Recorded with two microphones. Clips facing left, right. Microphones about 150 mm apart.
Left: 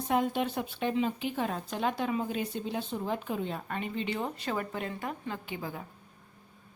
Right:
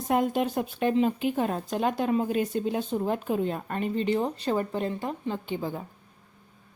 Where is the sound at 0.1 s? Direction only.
45° right (ahead or behind); by 5.8 s 30° right (ahead or behind).